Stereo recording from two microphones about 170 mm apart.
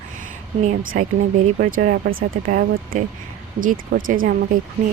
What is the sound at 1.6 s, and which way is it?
Speech, 60° right (ahead or behind).